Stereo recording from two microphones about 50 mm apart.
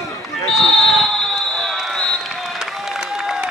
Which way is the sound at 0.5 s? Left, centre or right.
Centre.